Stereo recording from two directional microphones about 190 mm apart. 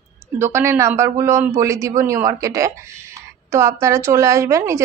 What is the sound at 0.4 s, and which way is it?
A woman's voice, 15° right (ahead or behind).